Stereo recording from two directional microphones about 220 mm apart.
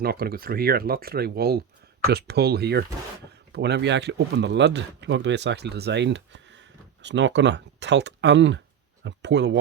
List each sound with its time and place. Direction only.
0.0 s a man's voice: 45° right (ahead or behind)